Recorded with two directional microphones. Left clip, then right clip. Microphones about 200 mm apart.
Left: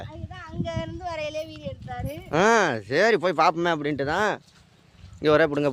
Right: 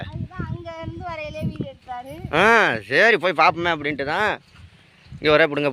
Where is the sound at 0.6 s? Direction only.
10° left (ahead or behind).